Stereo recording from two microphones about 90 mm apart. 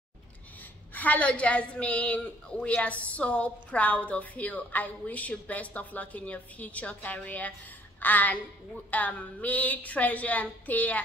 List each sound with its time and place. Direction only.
0.9 s a woman's voice: 15° left (ahead or behind)